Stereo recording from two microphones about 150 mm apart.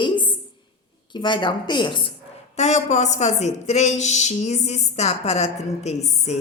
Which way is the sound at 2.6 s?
50° left (ahead or behind).